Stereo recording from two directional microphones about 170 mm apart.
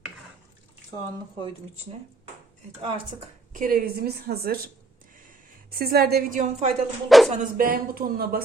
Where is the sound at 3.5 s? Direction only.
55° right (ahead or behind).